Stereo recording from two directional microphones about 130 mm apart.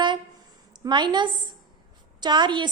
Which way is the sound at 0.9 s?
35° right (ahead or behind).